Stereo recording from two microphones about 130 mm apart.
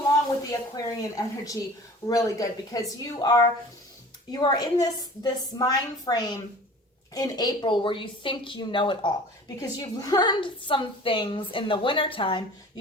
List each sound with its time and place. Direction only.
0.8 s a woman's voice: 25° left (ahead or behind)
9.6 s a woman's voice: 30° left (ahead or behind)